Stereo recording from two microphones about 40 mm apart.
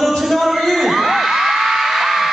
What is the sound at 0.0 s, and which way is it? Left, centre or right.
Whoop, centre.